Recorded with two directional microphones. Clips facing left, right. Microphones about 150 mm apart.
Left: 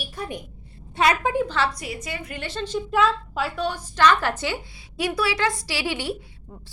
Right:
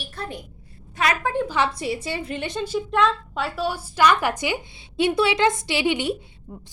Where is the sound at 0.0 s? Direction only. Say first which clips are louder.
Left 1 dB; 15° left (ahead or behind).